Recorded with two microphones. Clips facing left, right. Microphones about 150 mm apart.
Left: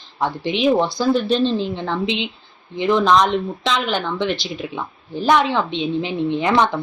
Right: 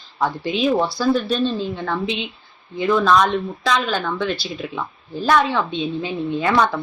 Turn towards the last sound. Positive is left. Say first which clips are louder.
# left 1 dB
turn(degrees=20)  # may be behind; listen again after turning